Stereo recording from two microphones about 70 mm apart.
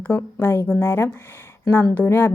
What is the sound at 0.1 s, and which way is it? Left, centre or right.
A woman's voice, left.